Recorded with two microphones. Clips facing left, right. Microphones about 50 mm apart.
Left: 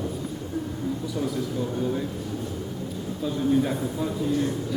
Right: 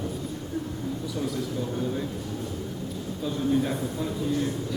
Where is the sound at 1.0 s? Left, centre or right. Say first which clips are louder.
Even; centre.